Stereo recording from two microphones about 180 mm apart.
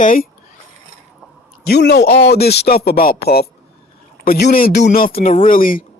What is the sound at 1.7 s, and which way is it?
A man's voice, 70° left (ahead or behind).